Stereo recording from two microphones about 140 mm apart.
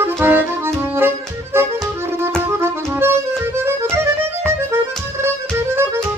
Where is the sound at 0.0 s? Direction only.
15° right (ahead or behind).